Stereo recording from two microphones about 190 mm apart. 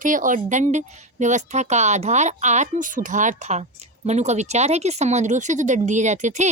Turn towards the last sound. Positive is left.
turn(degrees=-40)  # may be behind; listen again after turning